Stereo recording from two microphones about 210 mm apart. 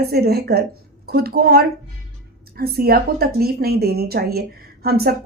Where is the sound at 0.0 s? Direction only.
50° right (ahead or behind).